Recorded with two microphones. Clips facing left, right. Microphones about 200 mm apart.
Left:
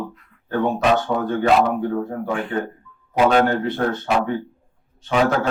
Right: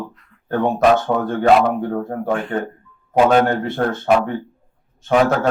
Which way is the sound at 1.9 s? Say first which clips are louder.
Right 2 dB; 50° right (ahead or behind).